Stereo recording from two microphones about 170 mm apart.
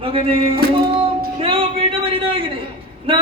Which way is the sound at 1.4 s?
30° right (ahead or behind).